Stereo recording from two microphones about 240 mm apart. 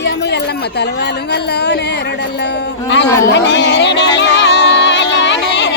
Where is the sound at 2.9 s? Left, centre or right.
Left.